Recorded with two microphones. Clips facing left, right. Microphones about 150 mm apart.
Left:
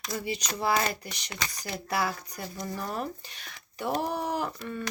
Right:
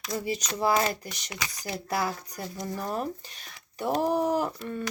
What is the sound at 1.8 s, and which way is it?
Speech, 40° right (ahead or behind).